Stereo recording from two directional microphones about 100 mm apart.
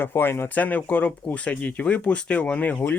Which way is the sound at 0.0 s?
20° left (ahead or behind).